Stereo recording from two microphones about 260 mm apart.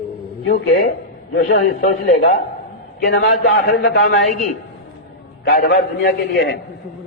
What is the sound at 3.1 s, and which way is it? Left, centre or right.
A man's voice, left.